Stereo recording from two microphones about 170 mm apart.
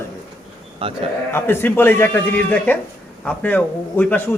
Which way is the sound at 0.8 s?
30° right (ahead or behind).